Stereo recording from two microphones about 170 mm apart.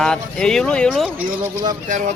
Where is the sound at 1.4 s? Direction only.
20° right (ahead or behind).